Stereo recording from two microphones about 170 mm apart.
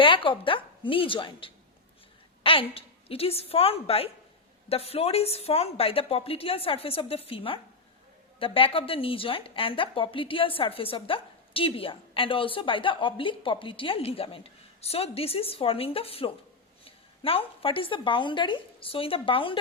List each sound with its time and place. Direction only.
0.0 s a woman's voice: 30° left (ahead or behind)